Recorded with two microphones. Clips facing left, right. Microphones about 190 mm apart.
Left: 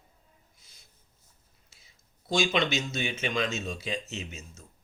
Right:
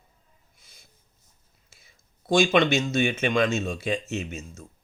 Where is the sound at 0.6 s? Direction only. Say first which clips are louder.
Right 4 dB; 55° right (ahead or behind).